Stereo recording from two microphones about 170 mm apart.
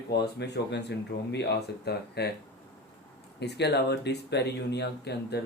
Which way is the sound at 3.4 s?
80° left.